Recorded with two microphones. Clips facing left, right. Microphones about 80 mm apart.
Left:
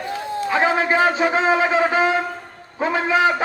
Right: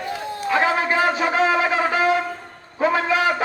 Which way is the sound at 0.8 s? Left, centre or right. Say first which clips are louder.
Left 2 dB; left.